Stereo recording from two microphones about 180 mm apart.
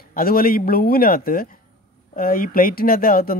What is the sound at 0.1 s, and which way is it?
Speech, 55° left (ahead or behind).